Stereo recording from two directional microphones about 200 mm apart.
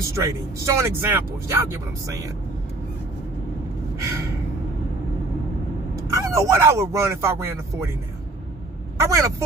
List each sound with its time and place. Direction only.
0.0 s speech: 15° right (ahead or behind)
3.9 s gasp: 15° right (ahead or behind)
5.9 s speech: 15° right (ahead or behind)
8.9 s speech: 15° right (ahead or behind)